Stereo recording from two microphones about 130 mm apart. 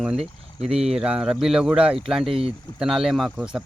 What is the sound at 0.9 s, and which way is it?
Speech, 5° right (ahead or behind).